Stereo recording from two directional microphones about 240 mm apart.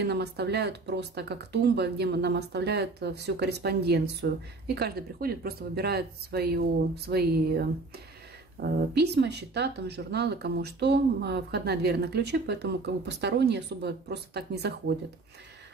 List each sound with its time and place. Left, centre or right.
0.0 s speech: right